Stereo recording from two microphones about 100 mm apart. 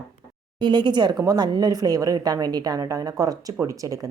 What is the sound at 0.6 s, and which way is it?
A woman's voice, 50° right (ahead or behind).